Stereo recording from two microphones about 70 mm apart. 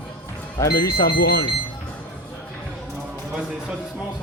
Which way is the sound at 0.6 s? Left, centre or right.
Left.